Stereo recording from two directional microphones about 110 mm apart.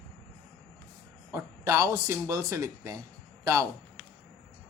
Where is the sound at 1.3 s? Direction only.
25° right (ahead or behind).